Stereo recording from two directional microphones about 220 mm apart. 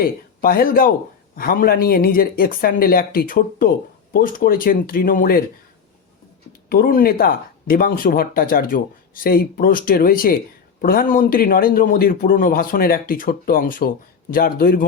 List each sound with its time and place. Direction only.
0.0 s a man's voice: 40° left (ahead or behind)
6.7 s a man's voice: 45° left (ahead or behind)